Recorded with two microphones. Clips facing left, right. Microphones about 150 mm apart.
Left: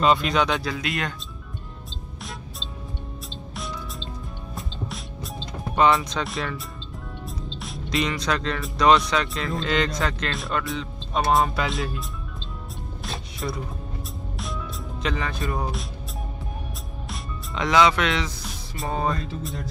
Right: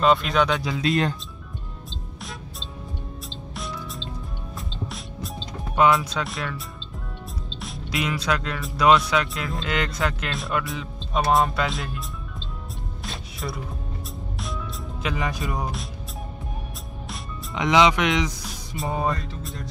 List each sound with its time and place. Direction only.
0.0 s speech: centre (ahead or behind)
0.7 s speech: 30° right (ahead or behind)
4.6 s music: centre (ahead or behind)
5.8 s speech: 5° right (ahead or behind)
7.6 s speech: centre (ahead or behind)
13.0 s music: centre (ahead or behind)
15.0 s speech: 10° right (ahead or behind)
17.6 s speech: 20° right (ahead or behind)
18.4 s music: centre (ahead or behind)
18.9 s speech: 5° right (ahead or behind)